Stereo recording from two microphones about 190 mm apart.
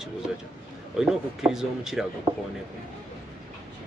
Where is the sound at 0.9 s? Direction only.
5° right (ahead or behind).